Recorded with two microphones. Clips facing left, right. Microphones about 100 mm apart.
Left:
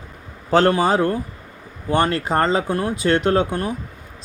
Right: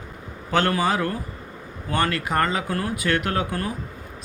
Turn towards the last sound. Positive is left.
turn(degrees=25)  # may be behind; listen again after turning